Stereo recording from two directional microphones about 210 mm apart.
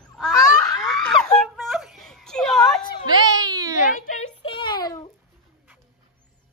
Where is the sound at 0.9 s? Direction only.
Centre (ahead or behind).